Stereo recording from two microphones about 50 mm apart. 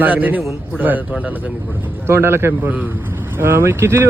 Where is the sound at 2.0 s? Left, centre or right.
Right.